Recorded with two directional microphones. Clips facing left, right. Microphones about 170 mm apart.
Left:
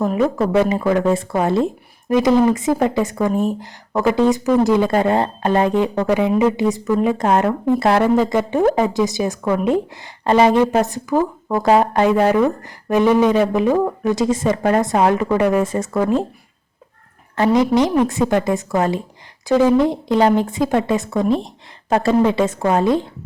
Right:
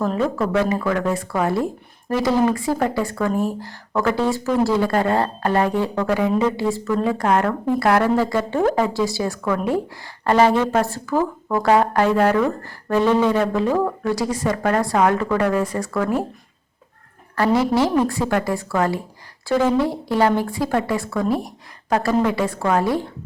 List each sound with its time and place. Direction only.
0.0 s a woman's voice: 10° left (ahead or behind)
0.6 s a woman's voice: 20° left (ahead or behind)
17.3 s speech: 20° left (ahead or behind)